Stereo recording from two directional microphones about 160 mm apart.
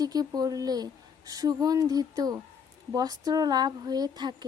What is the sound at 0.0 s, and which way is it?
Speech, 25° right (ahead or behind).